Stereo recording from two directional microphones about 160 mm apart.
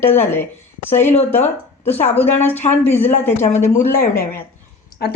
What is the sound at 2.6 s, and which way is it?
Speech, 40° left (ahead or behind).